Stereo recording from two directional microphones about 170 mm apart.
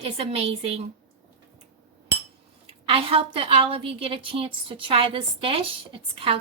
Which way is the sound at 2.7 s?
35° right (ahead or behind).